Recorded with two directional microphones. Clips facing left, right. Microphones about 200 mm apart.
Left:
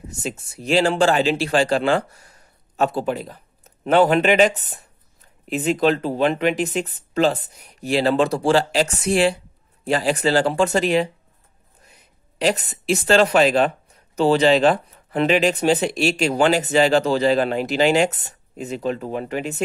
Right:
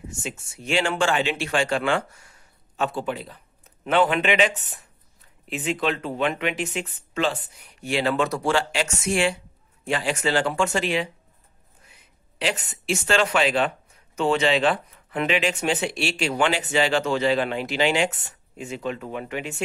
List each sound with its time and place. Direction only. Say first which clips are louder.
0.1 s speech: left 8 dB; 35° left (ahead or behind)